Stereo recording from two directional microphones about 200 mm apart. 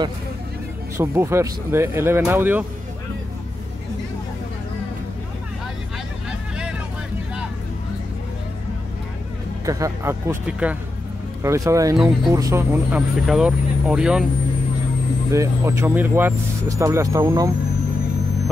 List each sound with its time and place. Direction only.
0.9 s speech: 15° right (ahead or behind)
9.7 s speech: 15° right (ahead or behind)
15.3 s speech: 15° right (ahead or behind)